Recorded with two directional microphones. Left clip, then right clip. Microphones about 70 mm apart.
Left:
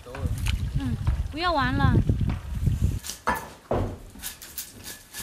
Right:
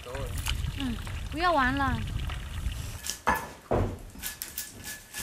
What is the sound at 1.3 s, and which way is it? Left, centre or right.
Speech, centre.